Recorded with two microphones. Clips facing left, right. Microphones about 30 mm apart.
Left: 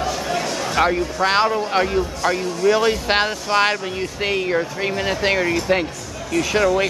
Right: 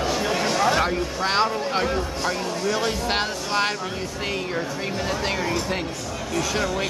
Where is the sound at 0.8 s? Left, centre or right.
Centre.